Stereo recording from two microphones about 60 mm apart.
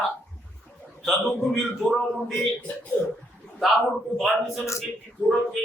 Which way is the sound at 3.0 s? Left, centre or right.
Left.